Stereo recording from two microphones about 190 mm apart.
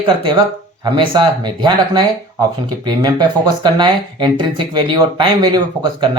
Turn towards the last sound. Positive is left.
turn(degrees=-20)  # may be behind; listen again after turning